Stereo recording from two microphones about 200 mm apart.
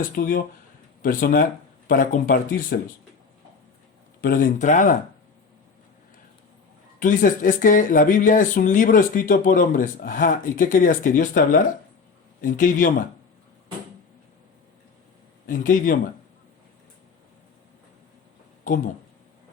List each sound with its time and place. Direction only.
0.0 s speech: 45° left (ahead or behind)
2.7 s speech: 55° left (ahead or behind)
4.2 s speech: 45° left (ahead or behind)
7.0 s speech: 40° left (ahead or behind)
15.4 s speech: 40° left (ahead or behind)